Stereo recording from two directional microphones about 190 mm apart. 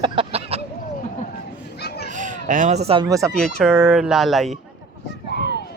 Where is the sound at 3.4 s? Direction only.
5° left (ahead or behind).